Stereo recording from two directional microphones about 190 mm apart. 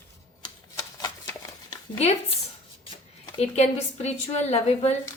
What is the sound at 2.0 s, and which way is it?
Speech, 35° left (ahead or behind).